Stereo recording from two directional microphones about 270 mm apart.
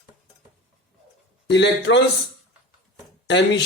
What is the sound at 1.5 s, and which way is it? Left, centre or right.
Speech, left.